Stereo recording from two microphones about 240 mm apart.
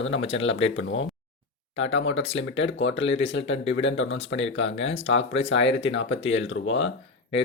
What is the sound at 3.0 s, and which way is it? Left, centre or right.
Speech, left.